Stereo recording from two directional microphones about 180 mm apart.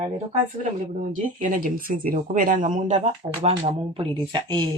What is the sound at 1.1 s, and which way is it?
Speech, 45° right (ahead or behind).